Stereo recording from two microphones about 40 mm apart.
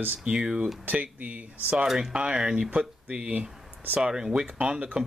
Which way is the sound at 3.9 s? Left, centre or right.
Centre.